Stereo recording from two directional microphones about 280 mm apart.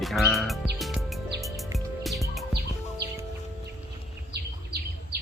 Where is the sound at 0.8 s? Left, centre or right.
Centre.